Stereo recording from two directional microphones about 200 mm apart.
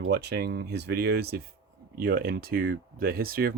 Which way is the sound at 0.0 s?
55° right (ahead or behind).